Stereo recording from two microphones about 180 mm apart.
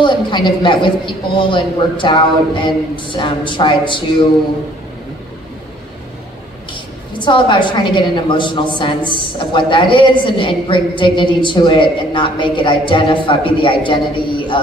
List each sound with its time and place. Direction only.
0.0 s a woman's voice: 25° left (ahead or behind)
7.2 s a woman's voice: 25° left (ahead or behind)